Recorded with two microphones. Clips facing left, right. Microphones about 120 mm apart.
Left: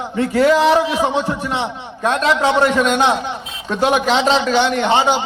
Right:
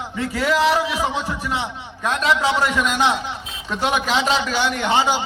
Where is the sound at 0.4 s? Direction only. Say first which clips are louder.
Left 4 dB; 25° left (ahead or behind).